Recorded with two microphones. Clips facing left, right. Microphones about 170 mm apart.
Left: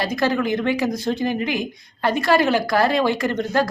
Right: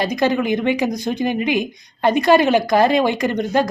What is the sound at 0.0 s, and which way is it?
A woman's voice, 20° right (ahead or behind).